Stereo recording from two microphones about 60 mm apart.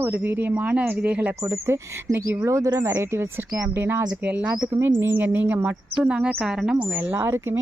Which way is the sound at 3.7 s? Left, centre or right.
Right.